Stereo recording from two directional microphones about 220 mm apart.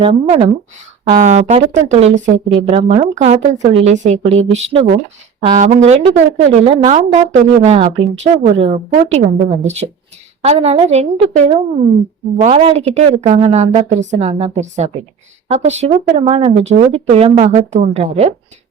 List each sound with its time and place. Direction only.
0.0 s a woman's voice: 25° right (ahead or behind)
10.4 s speech: 30° right (ahead or behind)